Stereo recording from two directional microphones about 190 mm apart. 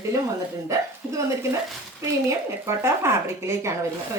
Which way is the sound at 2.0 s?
15° right (ahead or behind).